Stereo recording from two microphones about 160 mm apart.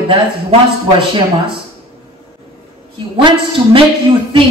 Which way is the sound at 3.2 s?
30° right (ahead or behind).